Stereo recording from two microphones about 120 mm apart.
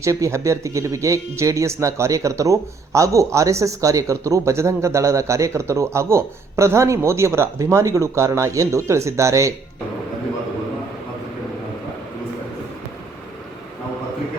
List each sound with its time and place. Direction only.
0.0 s a man's voice: 25° right (ahead or behind)